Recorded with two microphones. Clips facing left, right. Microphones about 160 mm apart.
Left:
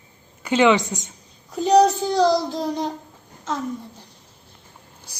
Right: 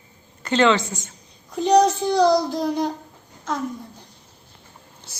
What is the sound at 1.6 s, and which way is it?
A child's voice, 5° left (ahead or behind).